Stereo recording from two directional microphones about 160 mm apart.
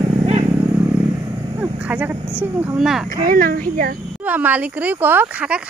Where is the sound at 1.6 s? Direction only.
10° right (ahead or behind).